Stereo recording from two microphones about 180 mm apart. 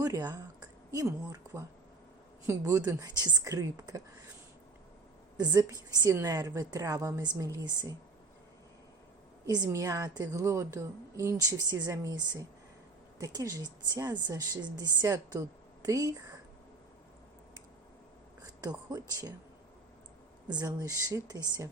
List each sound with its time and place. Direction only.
0.0 s a sound: 20° right (ahead or behind)
2.5 s speech: 15° right (ahead or behind)
5.4 s speech: 20° right (ahead or behind)
9.5 s a woman's voice: 20° right (ahead or behind)
18.6 s speech: 20° right (ahead or behind)
20.5 s speech: 20° right (ahead or behind)